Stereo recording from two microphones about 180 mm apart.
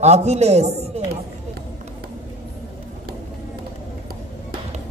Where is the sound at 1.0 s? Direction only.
35° right (ahead or behind).